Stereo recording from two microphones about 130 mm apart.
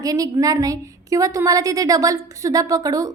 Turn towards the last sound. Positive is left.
turn(degrees=-25)  # may be behind; listen again after turning